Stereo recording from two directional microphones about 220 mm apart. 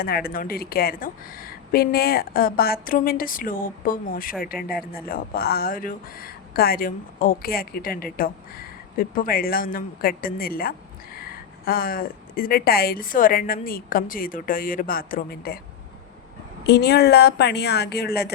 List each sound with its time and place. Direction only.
0.0 s speech: 45° left (ahead or behind)
16.6 s speech: 50° left (ahead or behind)